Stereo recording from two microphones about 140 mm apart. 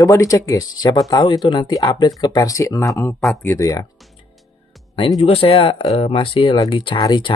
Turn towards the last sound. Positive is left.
turn(degrees=35)  # may be behind; listen again after turning